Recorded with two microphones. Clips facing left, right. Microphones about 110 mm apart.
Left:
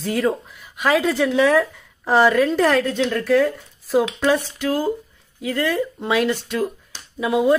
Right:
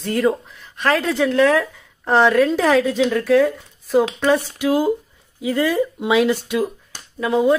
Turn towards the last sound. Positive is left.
turn(degrees=5)  # may be behind; listen again after turning